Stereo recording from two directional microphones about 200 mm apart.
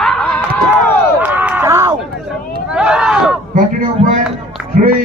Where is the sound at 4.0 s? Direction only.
30° right (ahead or behind).